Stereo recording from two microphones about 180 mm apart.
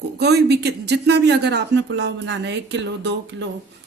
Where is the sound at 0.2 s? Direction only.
65° right (ahead or behind).